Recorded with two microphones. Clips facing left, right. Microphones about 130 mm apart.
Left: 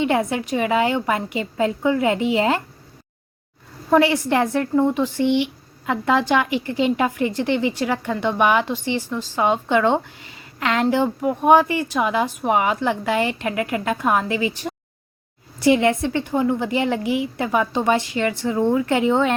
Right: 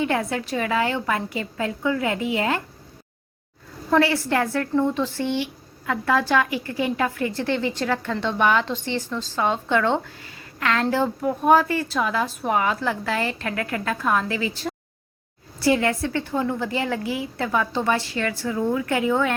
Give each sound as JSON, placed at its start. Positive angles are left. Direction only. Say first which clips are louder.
{"t": 0.0, "sound": "a woman's voice", "louder": "left 3 dB", "side_deg": 20}
{"t": 3.8, "sound": "a woman's voice", "louder": "left 3 dB", "side_deg": 20}